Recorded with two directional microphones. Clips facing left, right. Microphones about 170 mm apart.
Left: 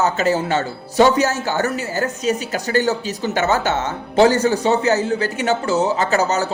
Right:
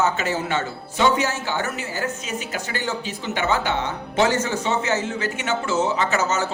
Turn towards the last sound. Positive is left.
turn(degrees=35)  # may be behind; listen again after turning